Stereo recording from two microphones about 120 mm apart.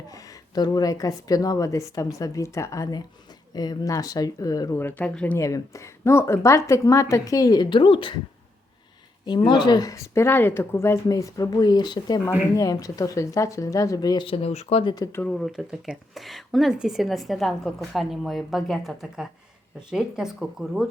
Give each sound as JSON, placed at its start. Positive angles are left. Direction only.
{"t": 0.1, "sound": "speech", "side_deg": 30}
{"t": 4.8, "sound": "speech", "side_deg": 15}
{"t": 5.4, "sound": "speech", "side_deg": 25}
{"t": 9.2, "sound": "speech", "side_deg": 40}
{"t": 14.3, "sound": "speech", "side_deg": 60}
{"t": 14.9, "sound": "speech", "side_deg": 25}
{"t": 15.2, "sound": "speech", "side_deg": 5}